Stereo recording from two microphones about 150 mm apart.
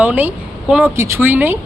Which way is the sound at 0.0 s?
10° right (ahead or behind).